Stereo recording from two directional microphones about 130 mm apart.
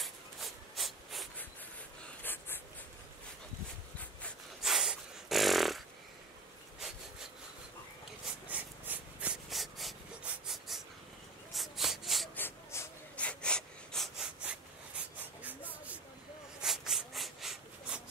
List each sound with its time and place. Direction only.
0.0 s rub: centre (ahead or behind)
4.6 s snort: 5° right (ahead or behind)
8.5 s breathing: 15° right (ahead or behind)
9.5 s breathing: centre (ahead or behind)
10.4 s a sound: centre (ahead or behind)
11.5 s wood: centre (ahead or behind)
12.4 s a sound: 20° left (ahead or behind); by 14.6 s 5° right (ahead or behind)
16.6 s rub: centre (ahead or behind)